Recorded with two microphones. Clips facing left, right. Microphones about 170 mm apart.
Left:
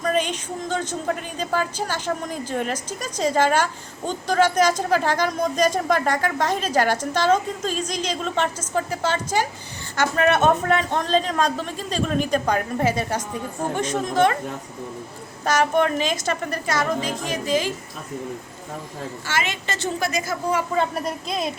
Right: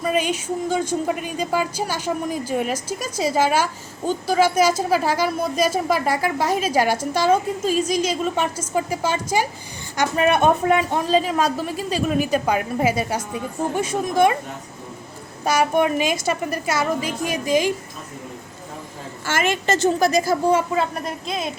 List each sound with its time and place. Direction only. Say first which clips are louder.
0.0 s speech: right 1 dB; 10° right (ahead or behind)
15.4 s speech: right 1 dB; 10° right (ahead or behind)
19.2 s a woman's voice: right 7 dB; 50° right (ahead or behind); by 20.7 s 30° right (ahead or behind)
20.7 s a woman's voice: even; centre (ahead or behind)